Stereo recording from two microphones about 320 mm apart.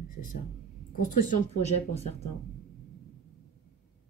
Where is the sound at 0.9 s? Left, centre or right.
Left.